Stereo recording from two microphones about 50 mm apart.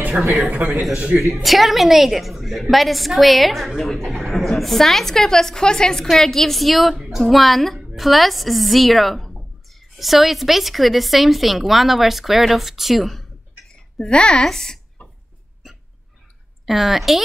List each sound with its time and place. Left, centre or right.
0.6 s a man's voice: right
1.3 s a woman's voice: centre
13.9 s a woman's voice: centre
15.0 s a sound: left
15.6 s hiccup: centre
16.6 s a woman's voice: centre